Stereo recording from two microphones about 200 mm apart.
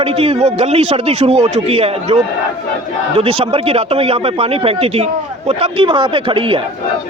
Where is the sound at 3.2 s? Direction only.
30° right (ahead or behind).